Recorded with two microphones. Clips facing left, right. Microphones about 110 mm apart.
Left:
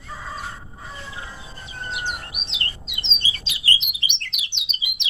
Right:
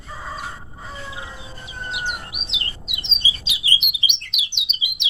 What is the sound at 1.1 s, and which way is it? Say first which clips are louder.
Chirp: right 2 dB; 15° right (ahead or behind).